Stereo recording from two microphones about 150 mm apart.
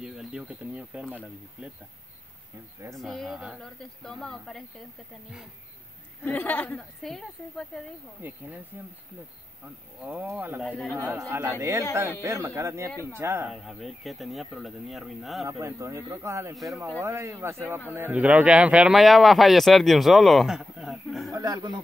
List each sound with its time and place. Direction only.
0.0 s speech: 5° right (ahead or behind)
2.9 s a man's voice: centre (ahead or behind)
6.2 s a woman's voice: 10° left (ahead or behind)
8.2 s speech: 15° right (ahead or behind)
10.0 s speech: 10° right (ahead or behind)
10.6 s a man's voice: centre (ahead or behind)
11.0 s speech: 15° right (ahead or behind)
13.5 s a man's voice: centre (ahead or behind)
15.6 s a man's voice: 20° right (ahead or behind); by 21.3 s centre (ahead or behind)
21.3 s speech: 25° right (ahead or behind)